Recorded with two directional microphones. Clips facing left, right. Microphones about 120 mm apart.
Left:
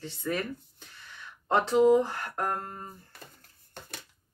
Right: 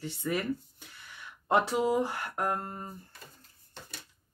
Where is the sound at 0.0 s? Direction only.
10° right (ahead or behind).